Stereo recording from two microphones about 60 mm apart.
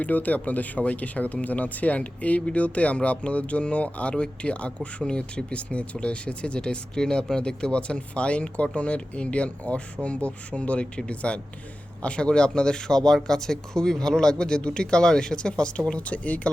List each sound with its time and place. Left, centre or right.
0.0 s speech: left